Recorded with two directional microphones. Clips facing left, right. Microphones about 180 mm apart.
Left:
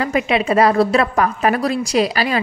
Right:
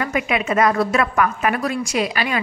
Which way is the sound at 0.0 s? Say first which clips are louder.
Left 4 dB; 30° left (ahead or behind).